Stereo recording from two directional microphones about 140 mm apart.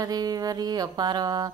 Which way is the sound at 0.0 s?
25° right (ahead or behind).